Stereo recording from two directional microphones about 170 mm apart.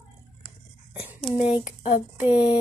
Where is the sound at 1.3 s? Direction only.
5° right (ahead or behind).